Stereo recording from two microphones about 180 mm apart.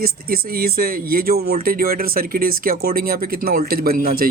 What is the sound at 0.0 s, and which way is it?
Speech, 55° right (ahead or behind).